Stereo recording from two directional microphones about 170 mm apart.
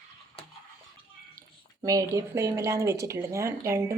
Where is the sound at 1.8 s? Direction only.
20° right (ahead or behind).